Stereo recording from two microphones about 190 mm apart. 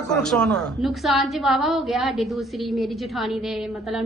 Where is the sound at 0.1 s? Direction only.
5° left (ahead or behind).